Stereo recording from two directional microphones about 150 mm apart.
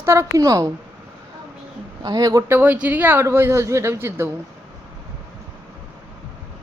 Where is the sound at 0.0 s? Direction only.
20° right (ahead or behind).